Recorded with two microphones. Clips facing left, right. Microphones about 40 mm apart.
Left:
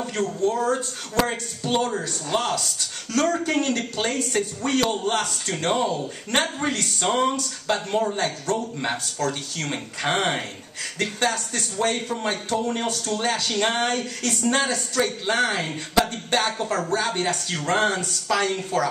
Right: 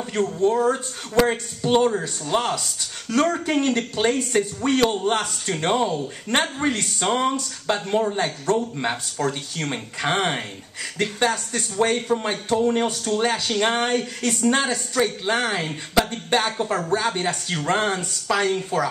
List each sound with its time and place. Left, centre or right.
0.1 s speech: right
5.7 s speech: centre
8.5 s speech: right
9.2 s speech: centre
11.0 s speech: centre
15.9 s speech: centre
16.3 s speech: centre